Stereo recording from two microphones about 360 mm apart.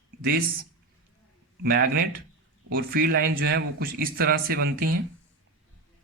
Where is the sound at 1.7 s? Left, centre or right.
Right.